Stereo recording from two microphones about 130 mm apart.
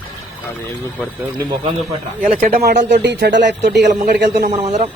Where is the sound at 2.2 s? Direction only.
80° right.